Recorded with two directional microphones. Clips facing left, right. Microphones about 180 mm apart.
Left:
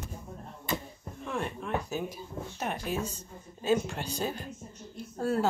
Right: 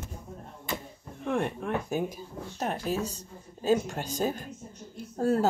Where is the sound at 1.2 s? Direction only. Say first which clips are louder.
Right 5 dB; 55° right (ahead or behind).